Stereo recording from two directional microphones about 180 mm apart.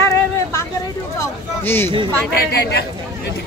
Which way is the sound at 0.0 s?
15° left (ahead or behind).